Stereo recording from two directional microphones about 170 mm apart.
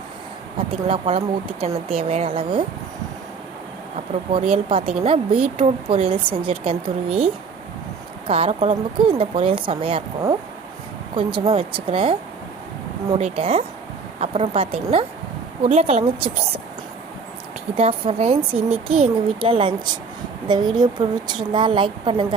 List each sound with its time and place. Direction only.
0.7 s speech: 30° right (ahead or behind)
3.9 s speech: 35° right (ahead or behind)
8.3 s speech: 35° right (ahead or behind)
13.1 s speech: 35° right (ahead or behind)
17.7 s a woman's voice: 35° right (ahead or behind)